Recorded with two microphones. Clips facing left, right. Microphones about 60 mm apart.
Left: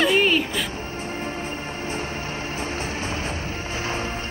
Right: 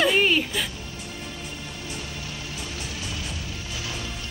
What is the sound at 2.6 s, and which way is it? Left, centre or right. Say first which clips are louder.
Music: left 8 dB; left.